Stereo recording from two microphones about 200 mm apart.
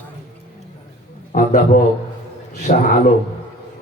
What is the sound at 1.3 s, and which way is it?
A man's voice, 40° left (ahead or behind).